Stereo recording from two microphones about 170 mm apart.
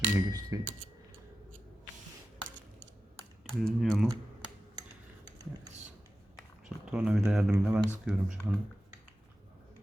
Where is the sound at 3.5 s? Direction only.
Centre (ahead or behind).